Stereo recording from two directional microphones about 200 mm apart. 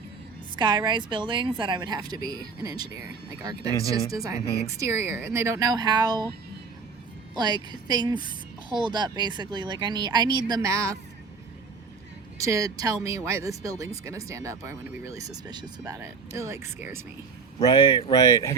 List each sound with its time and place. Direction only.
0.5 s speech: 20° right (ahead or behind)
7.3 s speech: 20° right (ahead or behind)
12.4 s speech: 15° right (ahead or behind)
17.6 s speech: 20° left (ahead or behind)